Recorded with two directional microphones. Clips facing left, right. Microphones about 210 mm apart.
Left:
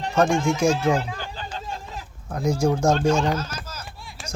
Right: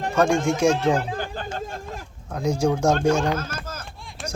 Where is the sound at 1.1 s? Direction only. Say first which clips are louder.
Right 4 dB; 50° right (ahead or behind).